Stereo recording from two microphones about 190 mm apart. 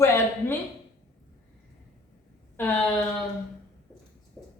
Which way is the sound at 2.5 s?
5° left (ahead or behind).